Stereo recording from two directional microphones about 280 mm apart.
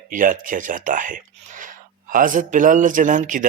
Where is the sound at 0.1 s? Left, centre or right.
Right.